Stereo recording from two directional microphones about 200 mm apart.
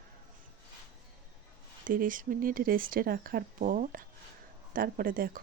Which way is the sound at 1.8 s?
45° right (ahead or behind).